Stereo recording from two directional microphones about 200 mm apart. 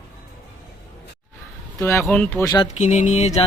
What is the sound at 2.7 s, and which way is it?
Music, 35° left (ahead or behind).